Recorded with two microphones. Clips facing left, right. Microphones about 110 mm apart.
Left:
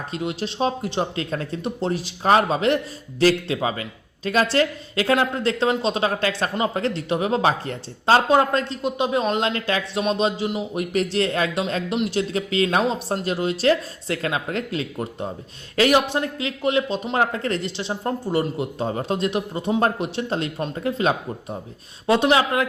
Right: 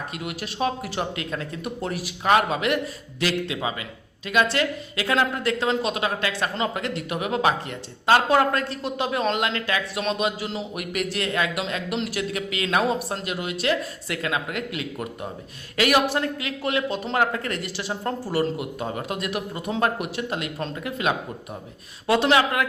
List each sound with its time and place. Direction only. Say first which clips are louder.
0.1 s speech: left 5 dB; 25° left (ahead or behind)